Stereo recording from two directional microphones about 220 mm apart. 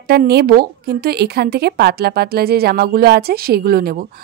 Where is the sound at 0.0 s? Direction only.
45° right (ahead or behind).